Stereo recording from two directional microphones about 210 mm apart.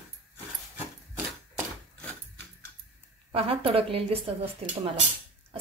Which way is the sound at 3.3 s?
25° right (ahead or behind).